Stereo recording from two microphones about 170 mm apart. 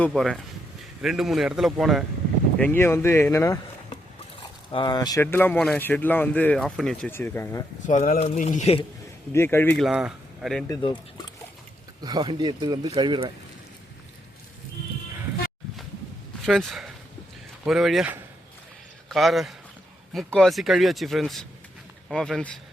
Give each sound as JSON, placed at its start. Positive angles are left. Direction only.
{"t": 0.0, "sound": "speech", "side_deg": 5}
{"t": 2.6, "sound": "speech", "side_deg": 10}
{"t": 4.7, "sound": "speech", "side_deg": 25}
{"t": 7.9, "sound": "speech", "side_deg": 45}
{"t": 9.3, "sound": "speech", "side_deg": 15}
{"t": 9.8, "sound": "speech", "side_deg": -5}
{"t": 12.0, "sound": "a man's voice", "side_deg": -25}
{"t": 16.5, "sound": "a man's voice", "side_deg": 0}